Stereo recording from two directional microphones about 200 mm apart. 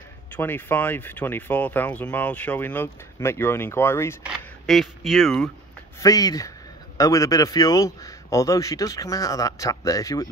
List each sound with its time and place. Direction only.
0.3 s speech: 10° left (ahead or behind)
4.2 s speech: centre (ahead or behind)
5.9 s speech: 15° left (ahead or behind)